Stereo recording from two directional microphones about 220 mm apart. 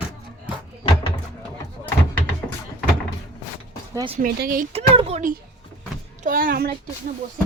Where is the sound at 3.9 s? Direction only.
25° right (ahead or behind).